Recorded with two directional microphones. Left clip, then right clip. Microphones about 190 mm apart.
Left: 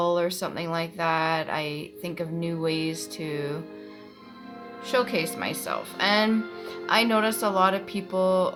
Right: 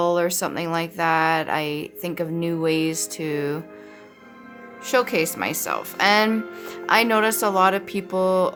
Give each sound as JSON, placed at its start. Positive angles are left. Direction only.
{"t": 0.0, "sound": "speech", "side_deg": -45}
{"t": 4.9, "sound": "speech", "side_deg": -45}